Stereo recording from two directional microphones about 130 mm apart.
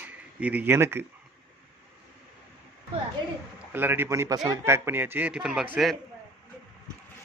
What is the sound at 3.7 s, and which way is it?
A man's voice, 15° right (ahead or behind).